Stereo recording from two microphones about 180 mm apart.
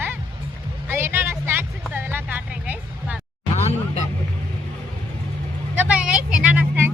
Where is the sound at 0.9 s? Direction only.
15° right (ahead or behind).